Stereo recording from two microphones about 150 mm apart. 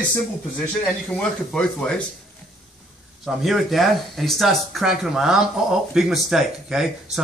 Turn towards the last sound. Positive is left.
turn(degrees=-5)  # may be behind; listen again after turning